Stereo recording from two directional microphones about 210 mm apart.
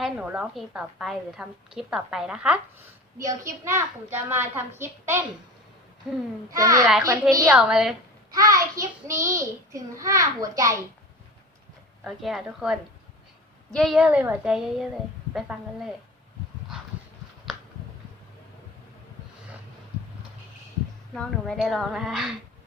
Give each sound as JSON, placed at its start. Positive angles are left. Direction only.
{"t": 0.0, "sound": "a woman's voice", "side_deg": -5}
{"t": 6.0, "sound": "a woman's voice", "side_deg": 0}
{"t": 6.5, "sound": "a child's voice", "side_deg": -15}
{"t": 7.5, "sound": "a woman's voice", "side_deg": -5}
{"t": 8.3, "sound": "a child's voice", "side_deg": -15}
{"t": 12.0, "sound": "a woman's voice", "side_deg": 0}
{"t": 21.1, "sound": "a woman's voice", "side_deg": 5}